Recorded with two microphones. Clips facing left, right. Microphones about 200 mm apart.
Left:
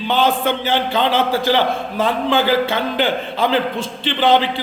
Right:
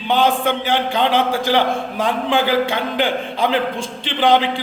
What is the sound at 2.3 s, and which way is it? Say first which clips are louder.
A man's voice: even; 15° right (ahead or behind).